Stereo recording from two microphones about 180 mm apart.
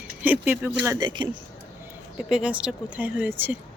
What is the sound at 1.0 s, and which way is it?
Speech, 25° right (ahead or behind).